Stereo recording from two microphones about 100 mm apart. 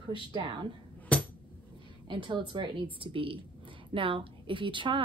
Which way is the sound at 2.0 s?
55° right (ahead or behind).